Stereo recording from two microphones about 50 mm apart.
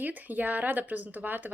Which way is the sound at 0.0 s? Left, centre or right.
Right.